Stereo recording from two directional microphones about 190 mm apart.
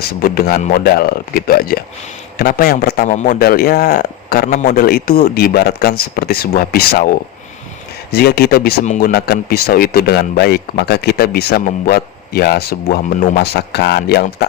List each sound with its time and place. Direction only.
0.0 s a man's voice: 50° left (ahead or behind)
3.1 s a man's voice: 45° left (ahead or behind)
8.1 s speech: 55° left (ahead or behind)